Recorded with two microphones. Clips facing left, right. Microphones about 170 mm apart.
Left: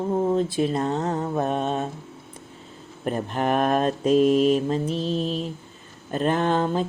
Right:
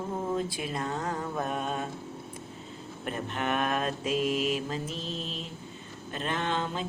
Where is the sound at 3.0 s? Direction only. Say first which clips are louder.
Left 8 dB; 40° left (ahead or behind).